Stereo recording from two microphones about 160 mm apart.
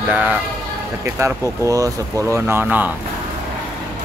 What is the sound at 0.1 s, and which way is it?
Speech, 10° right (ahead or behind).